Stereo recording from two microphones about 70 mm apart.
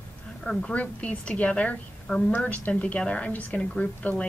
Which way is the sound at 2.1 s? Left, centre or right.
Centre.